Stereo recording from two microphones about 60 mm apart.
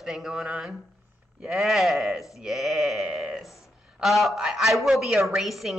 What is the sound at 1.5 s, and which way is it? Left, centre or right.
A woman's voice, centre.